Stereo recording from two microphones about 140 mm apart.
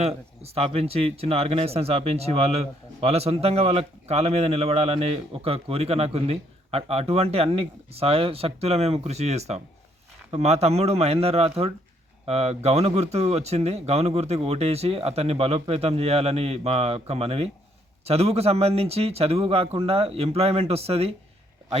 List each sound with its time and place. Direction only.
0.0 s speech: 45° right (ahead or behind)